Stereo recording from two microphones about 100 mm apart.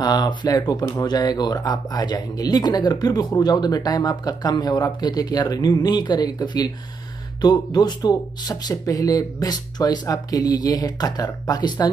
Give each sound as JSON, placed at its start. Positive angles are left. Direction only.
{"t": 0.0, "sound": "speech", "side_deg": 45}